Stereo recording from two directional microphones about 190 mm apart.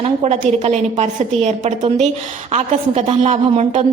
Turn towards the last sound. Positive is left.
turn(degrees=-35)  # may be behind; listen again after turning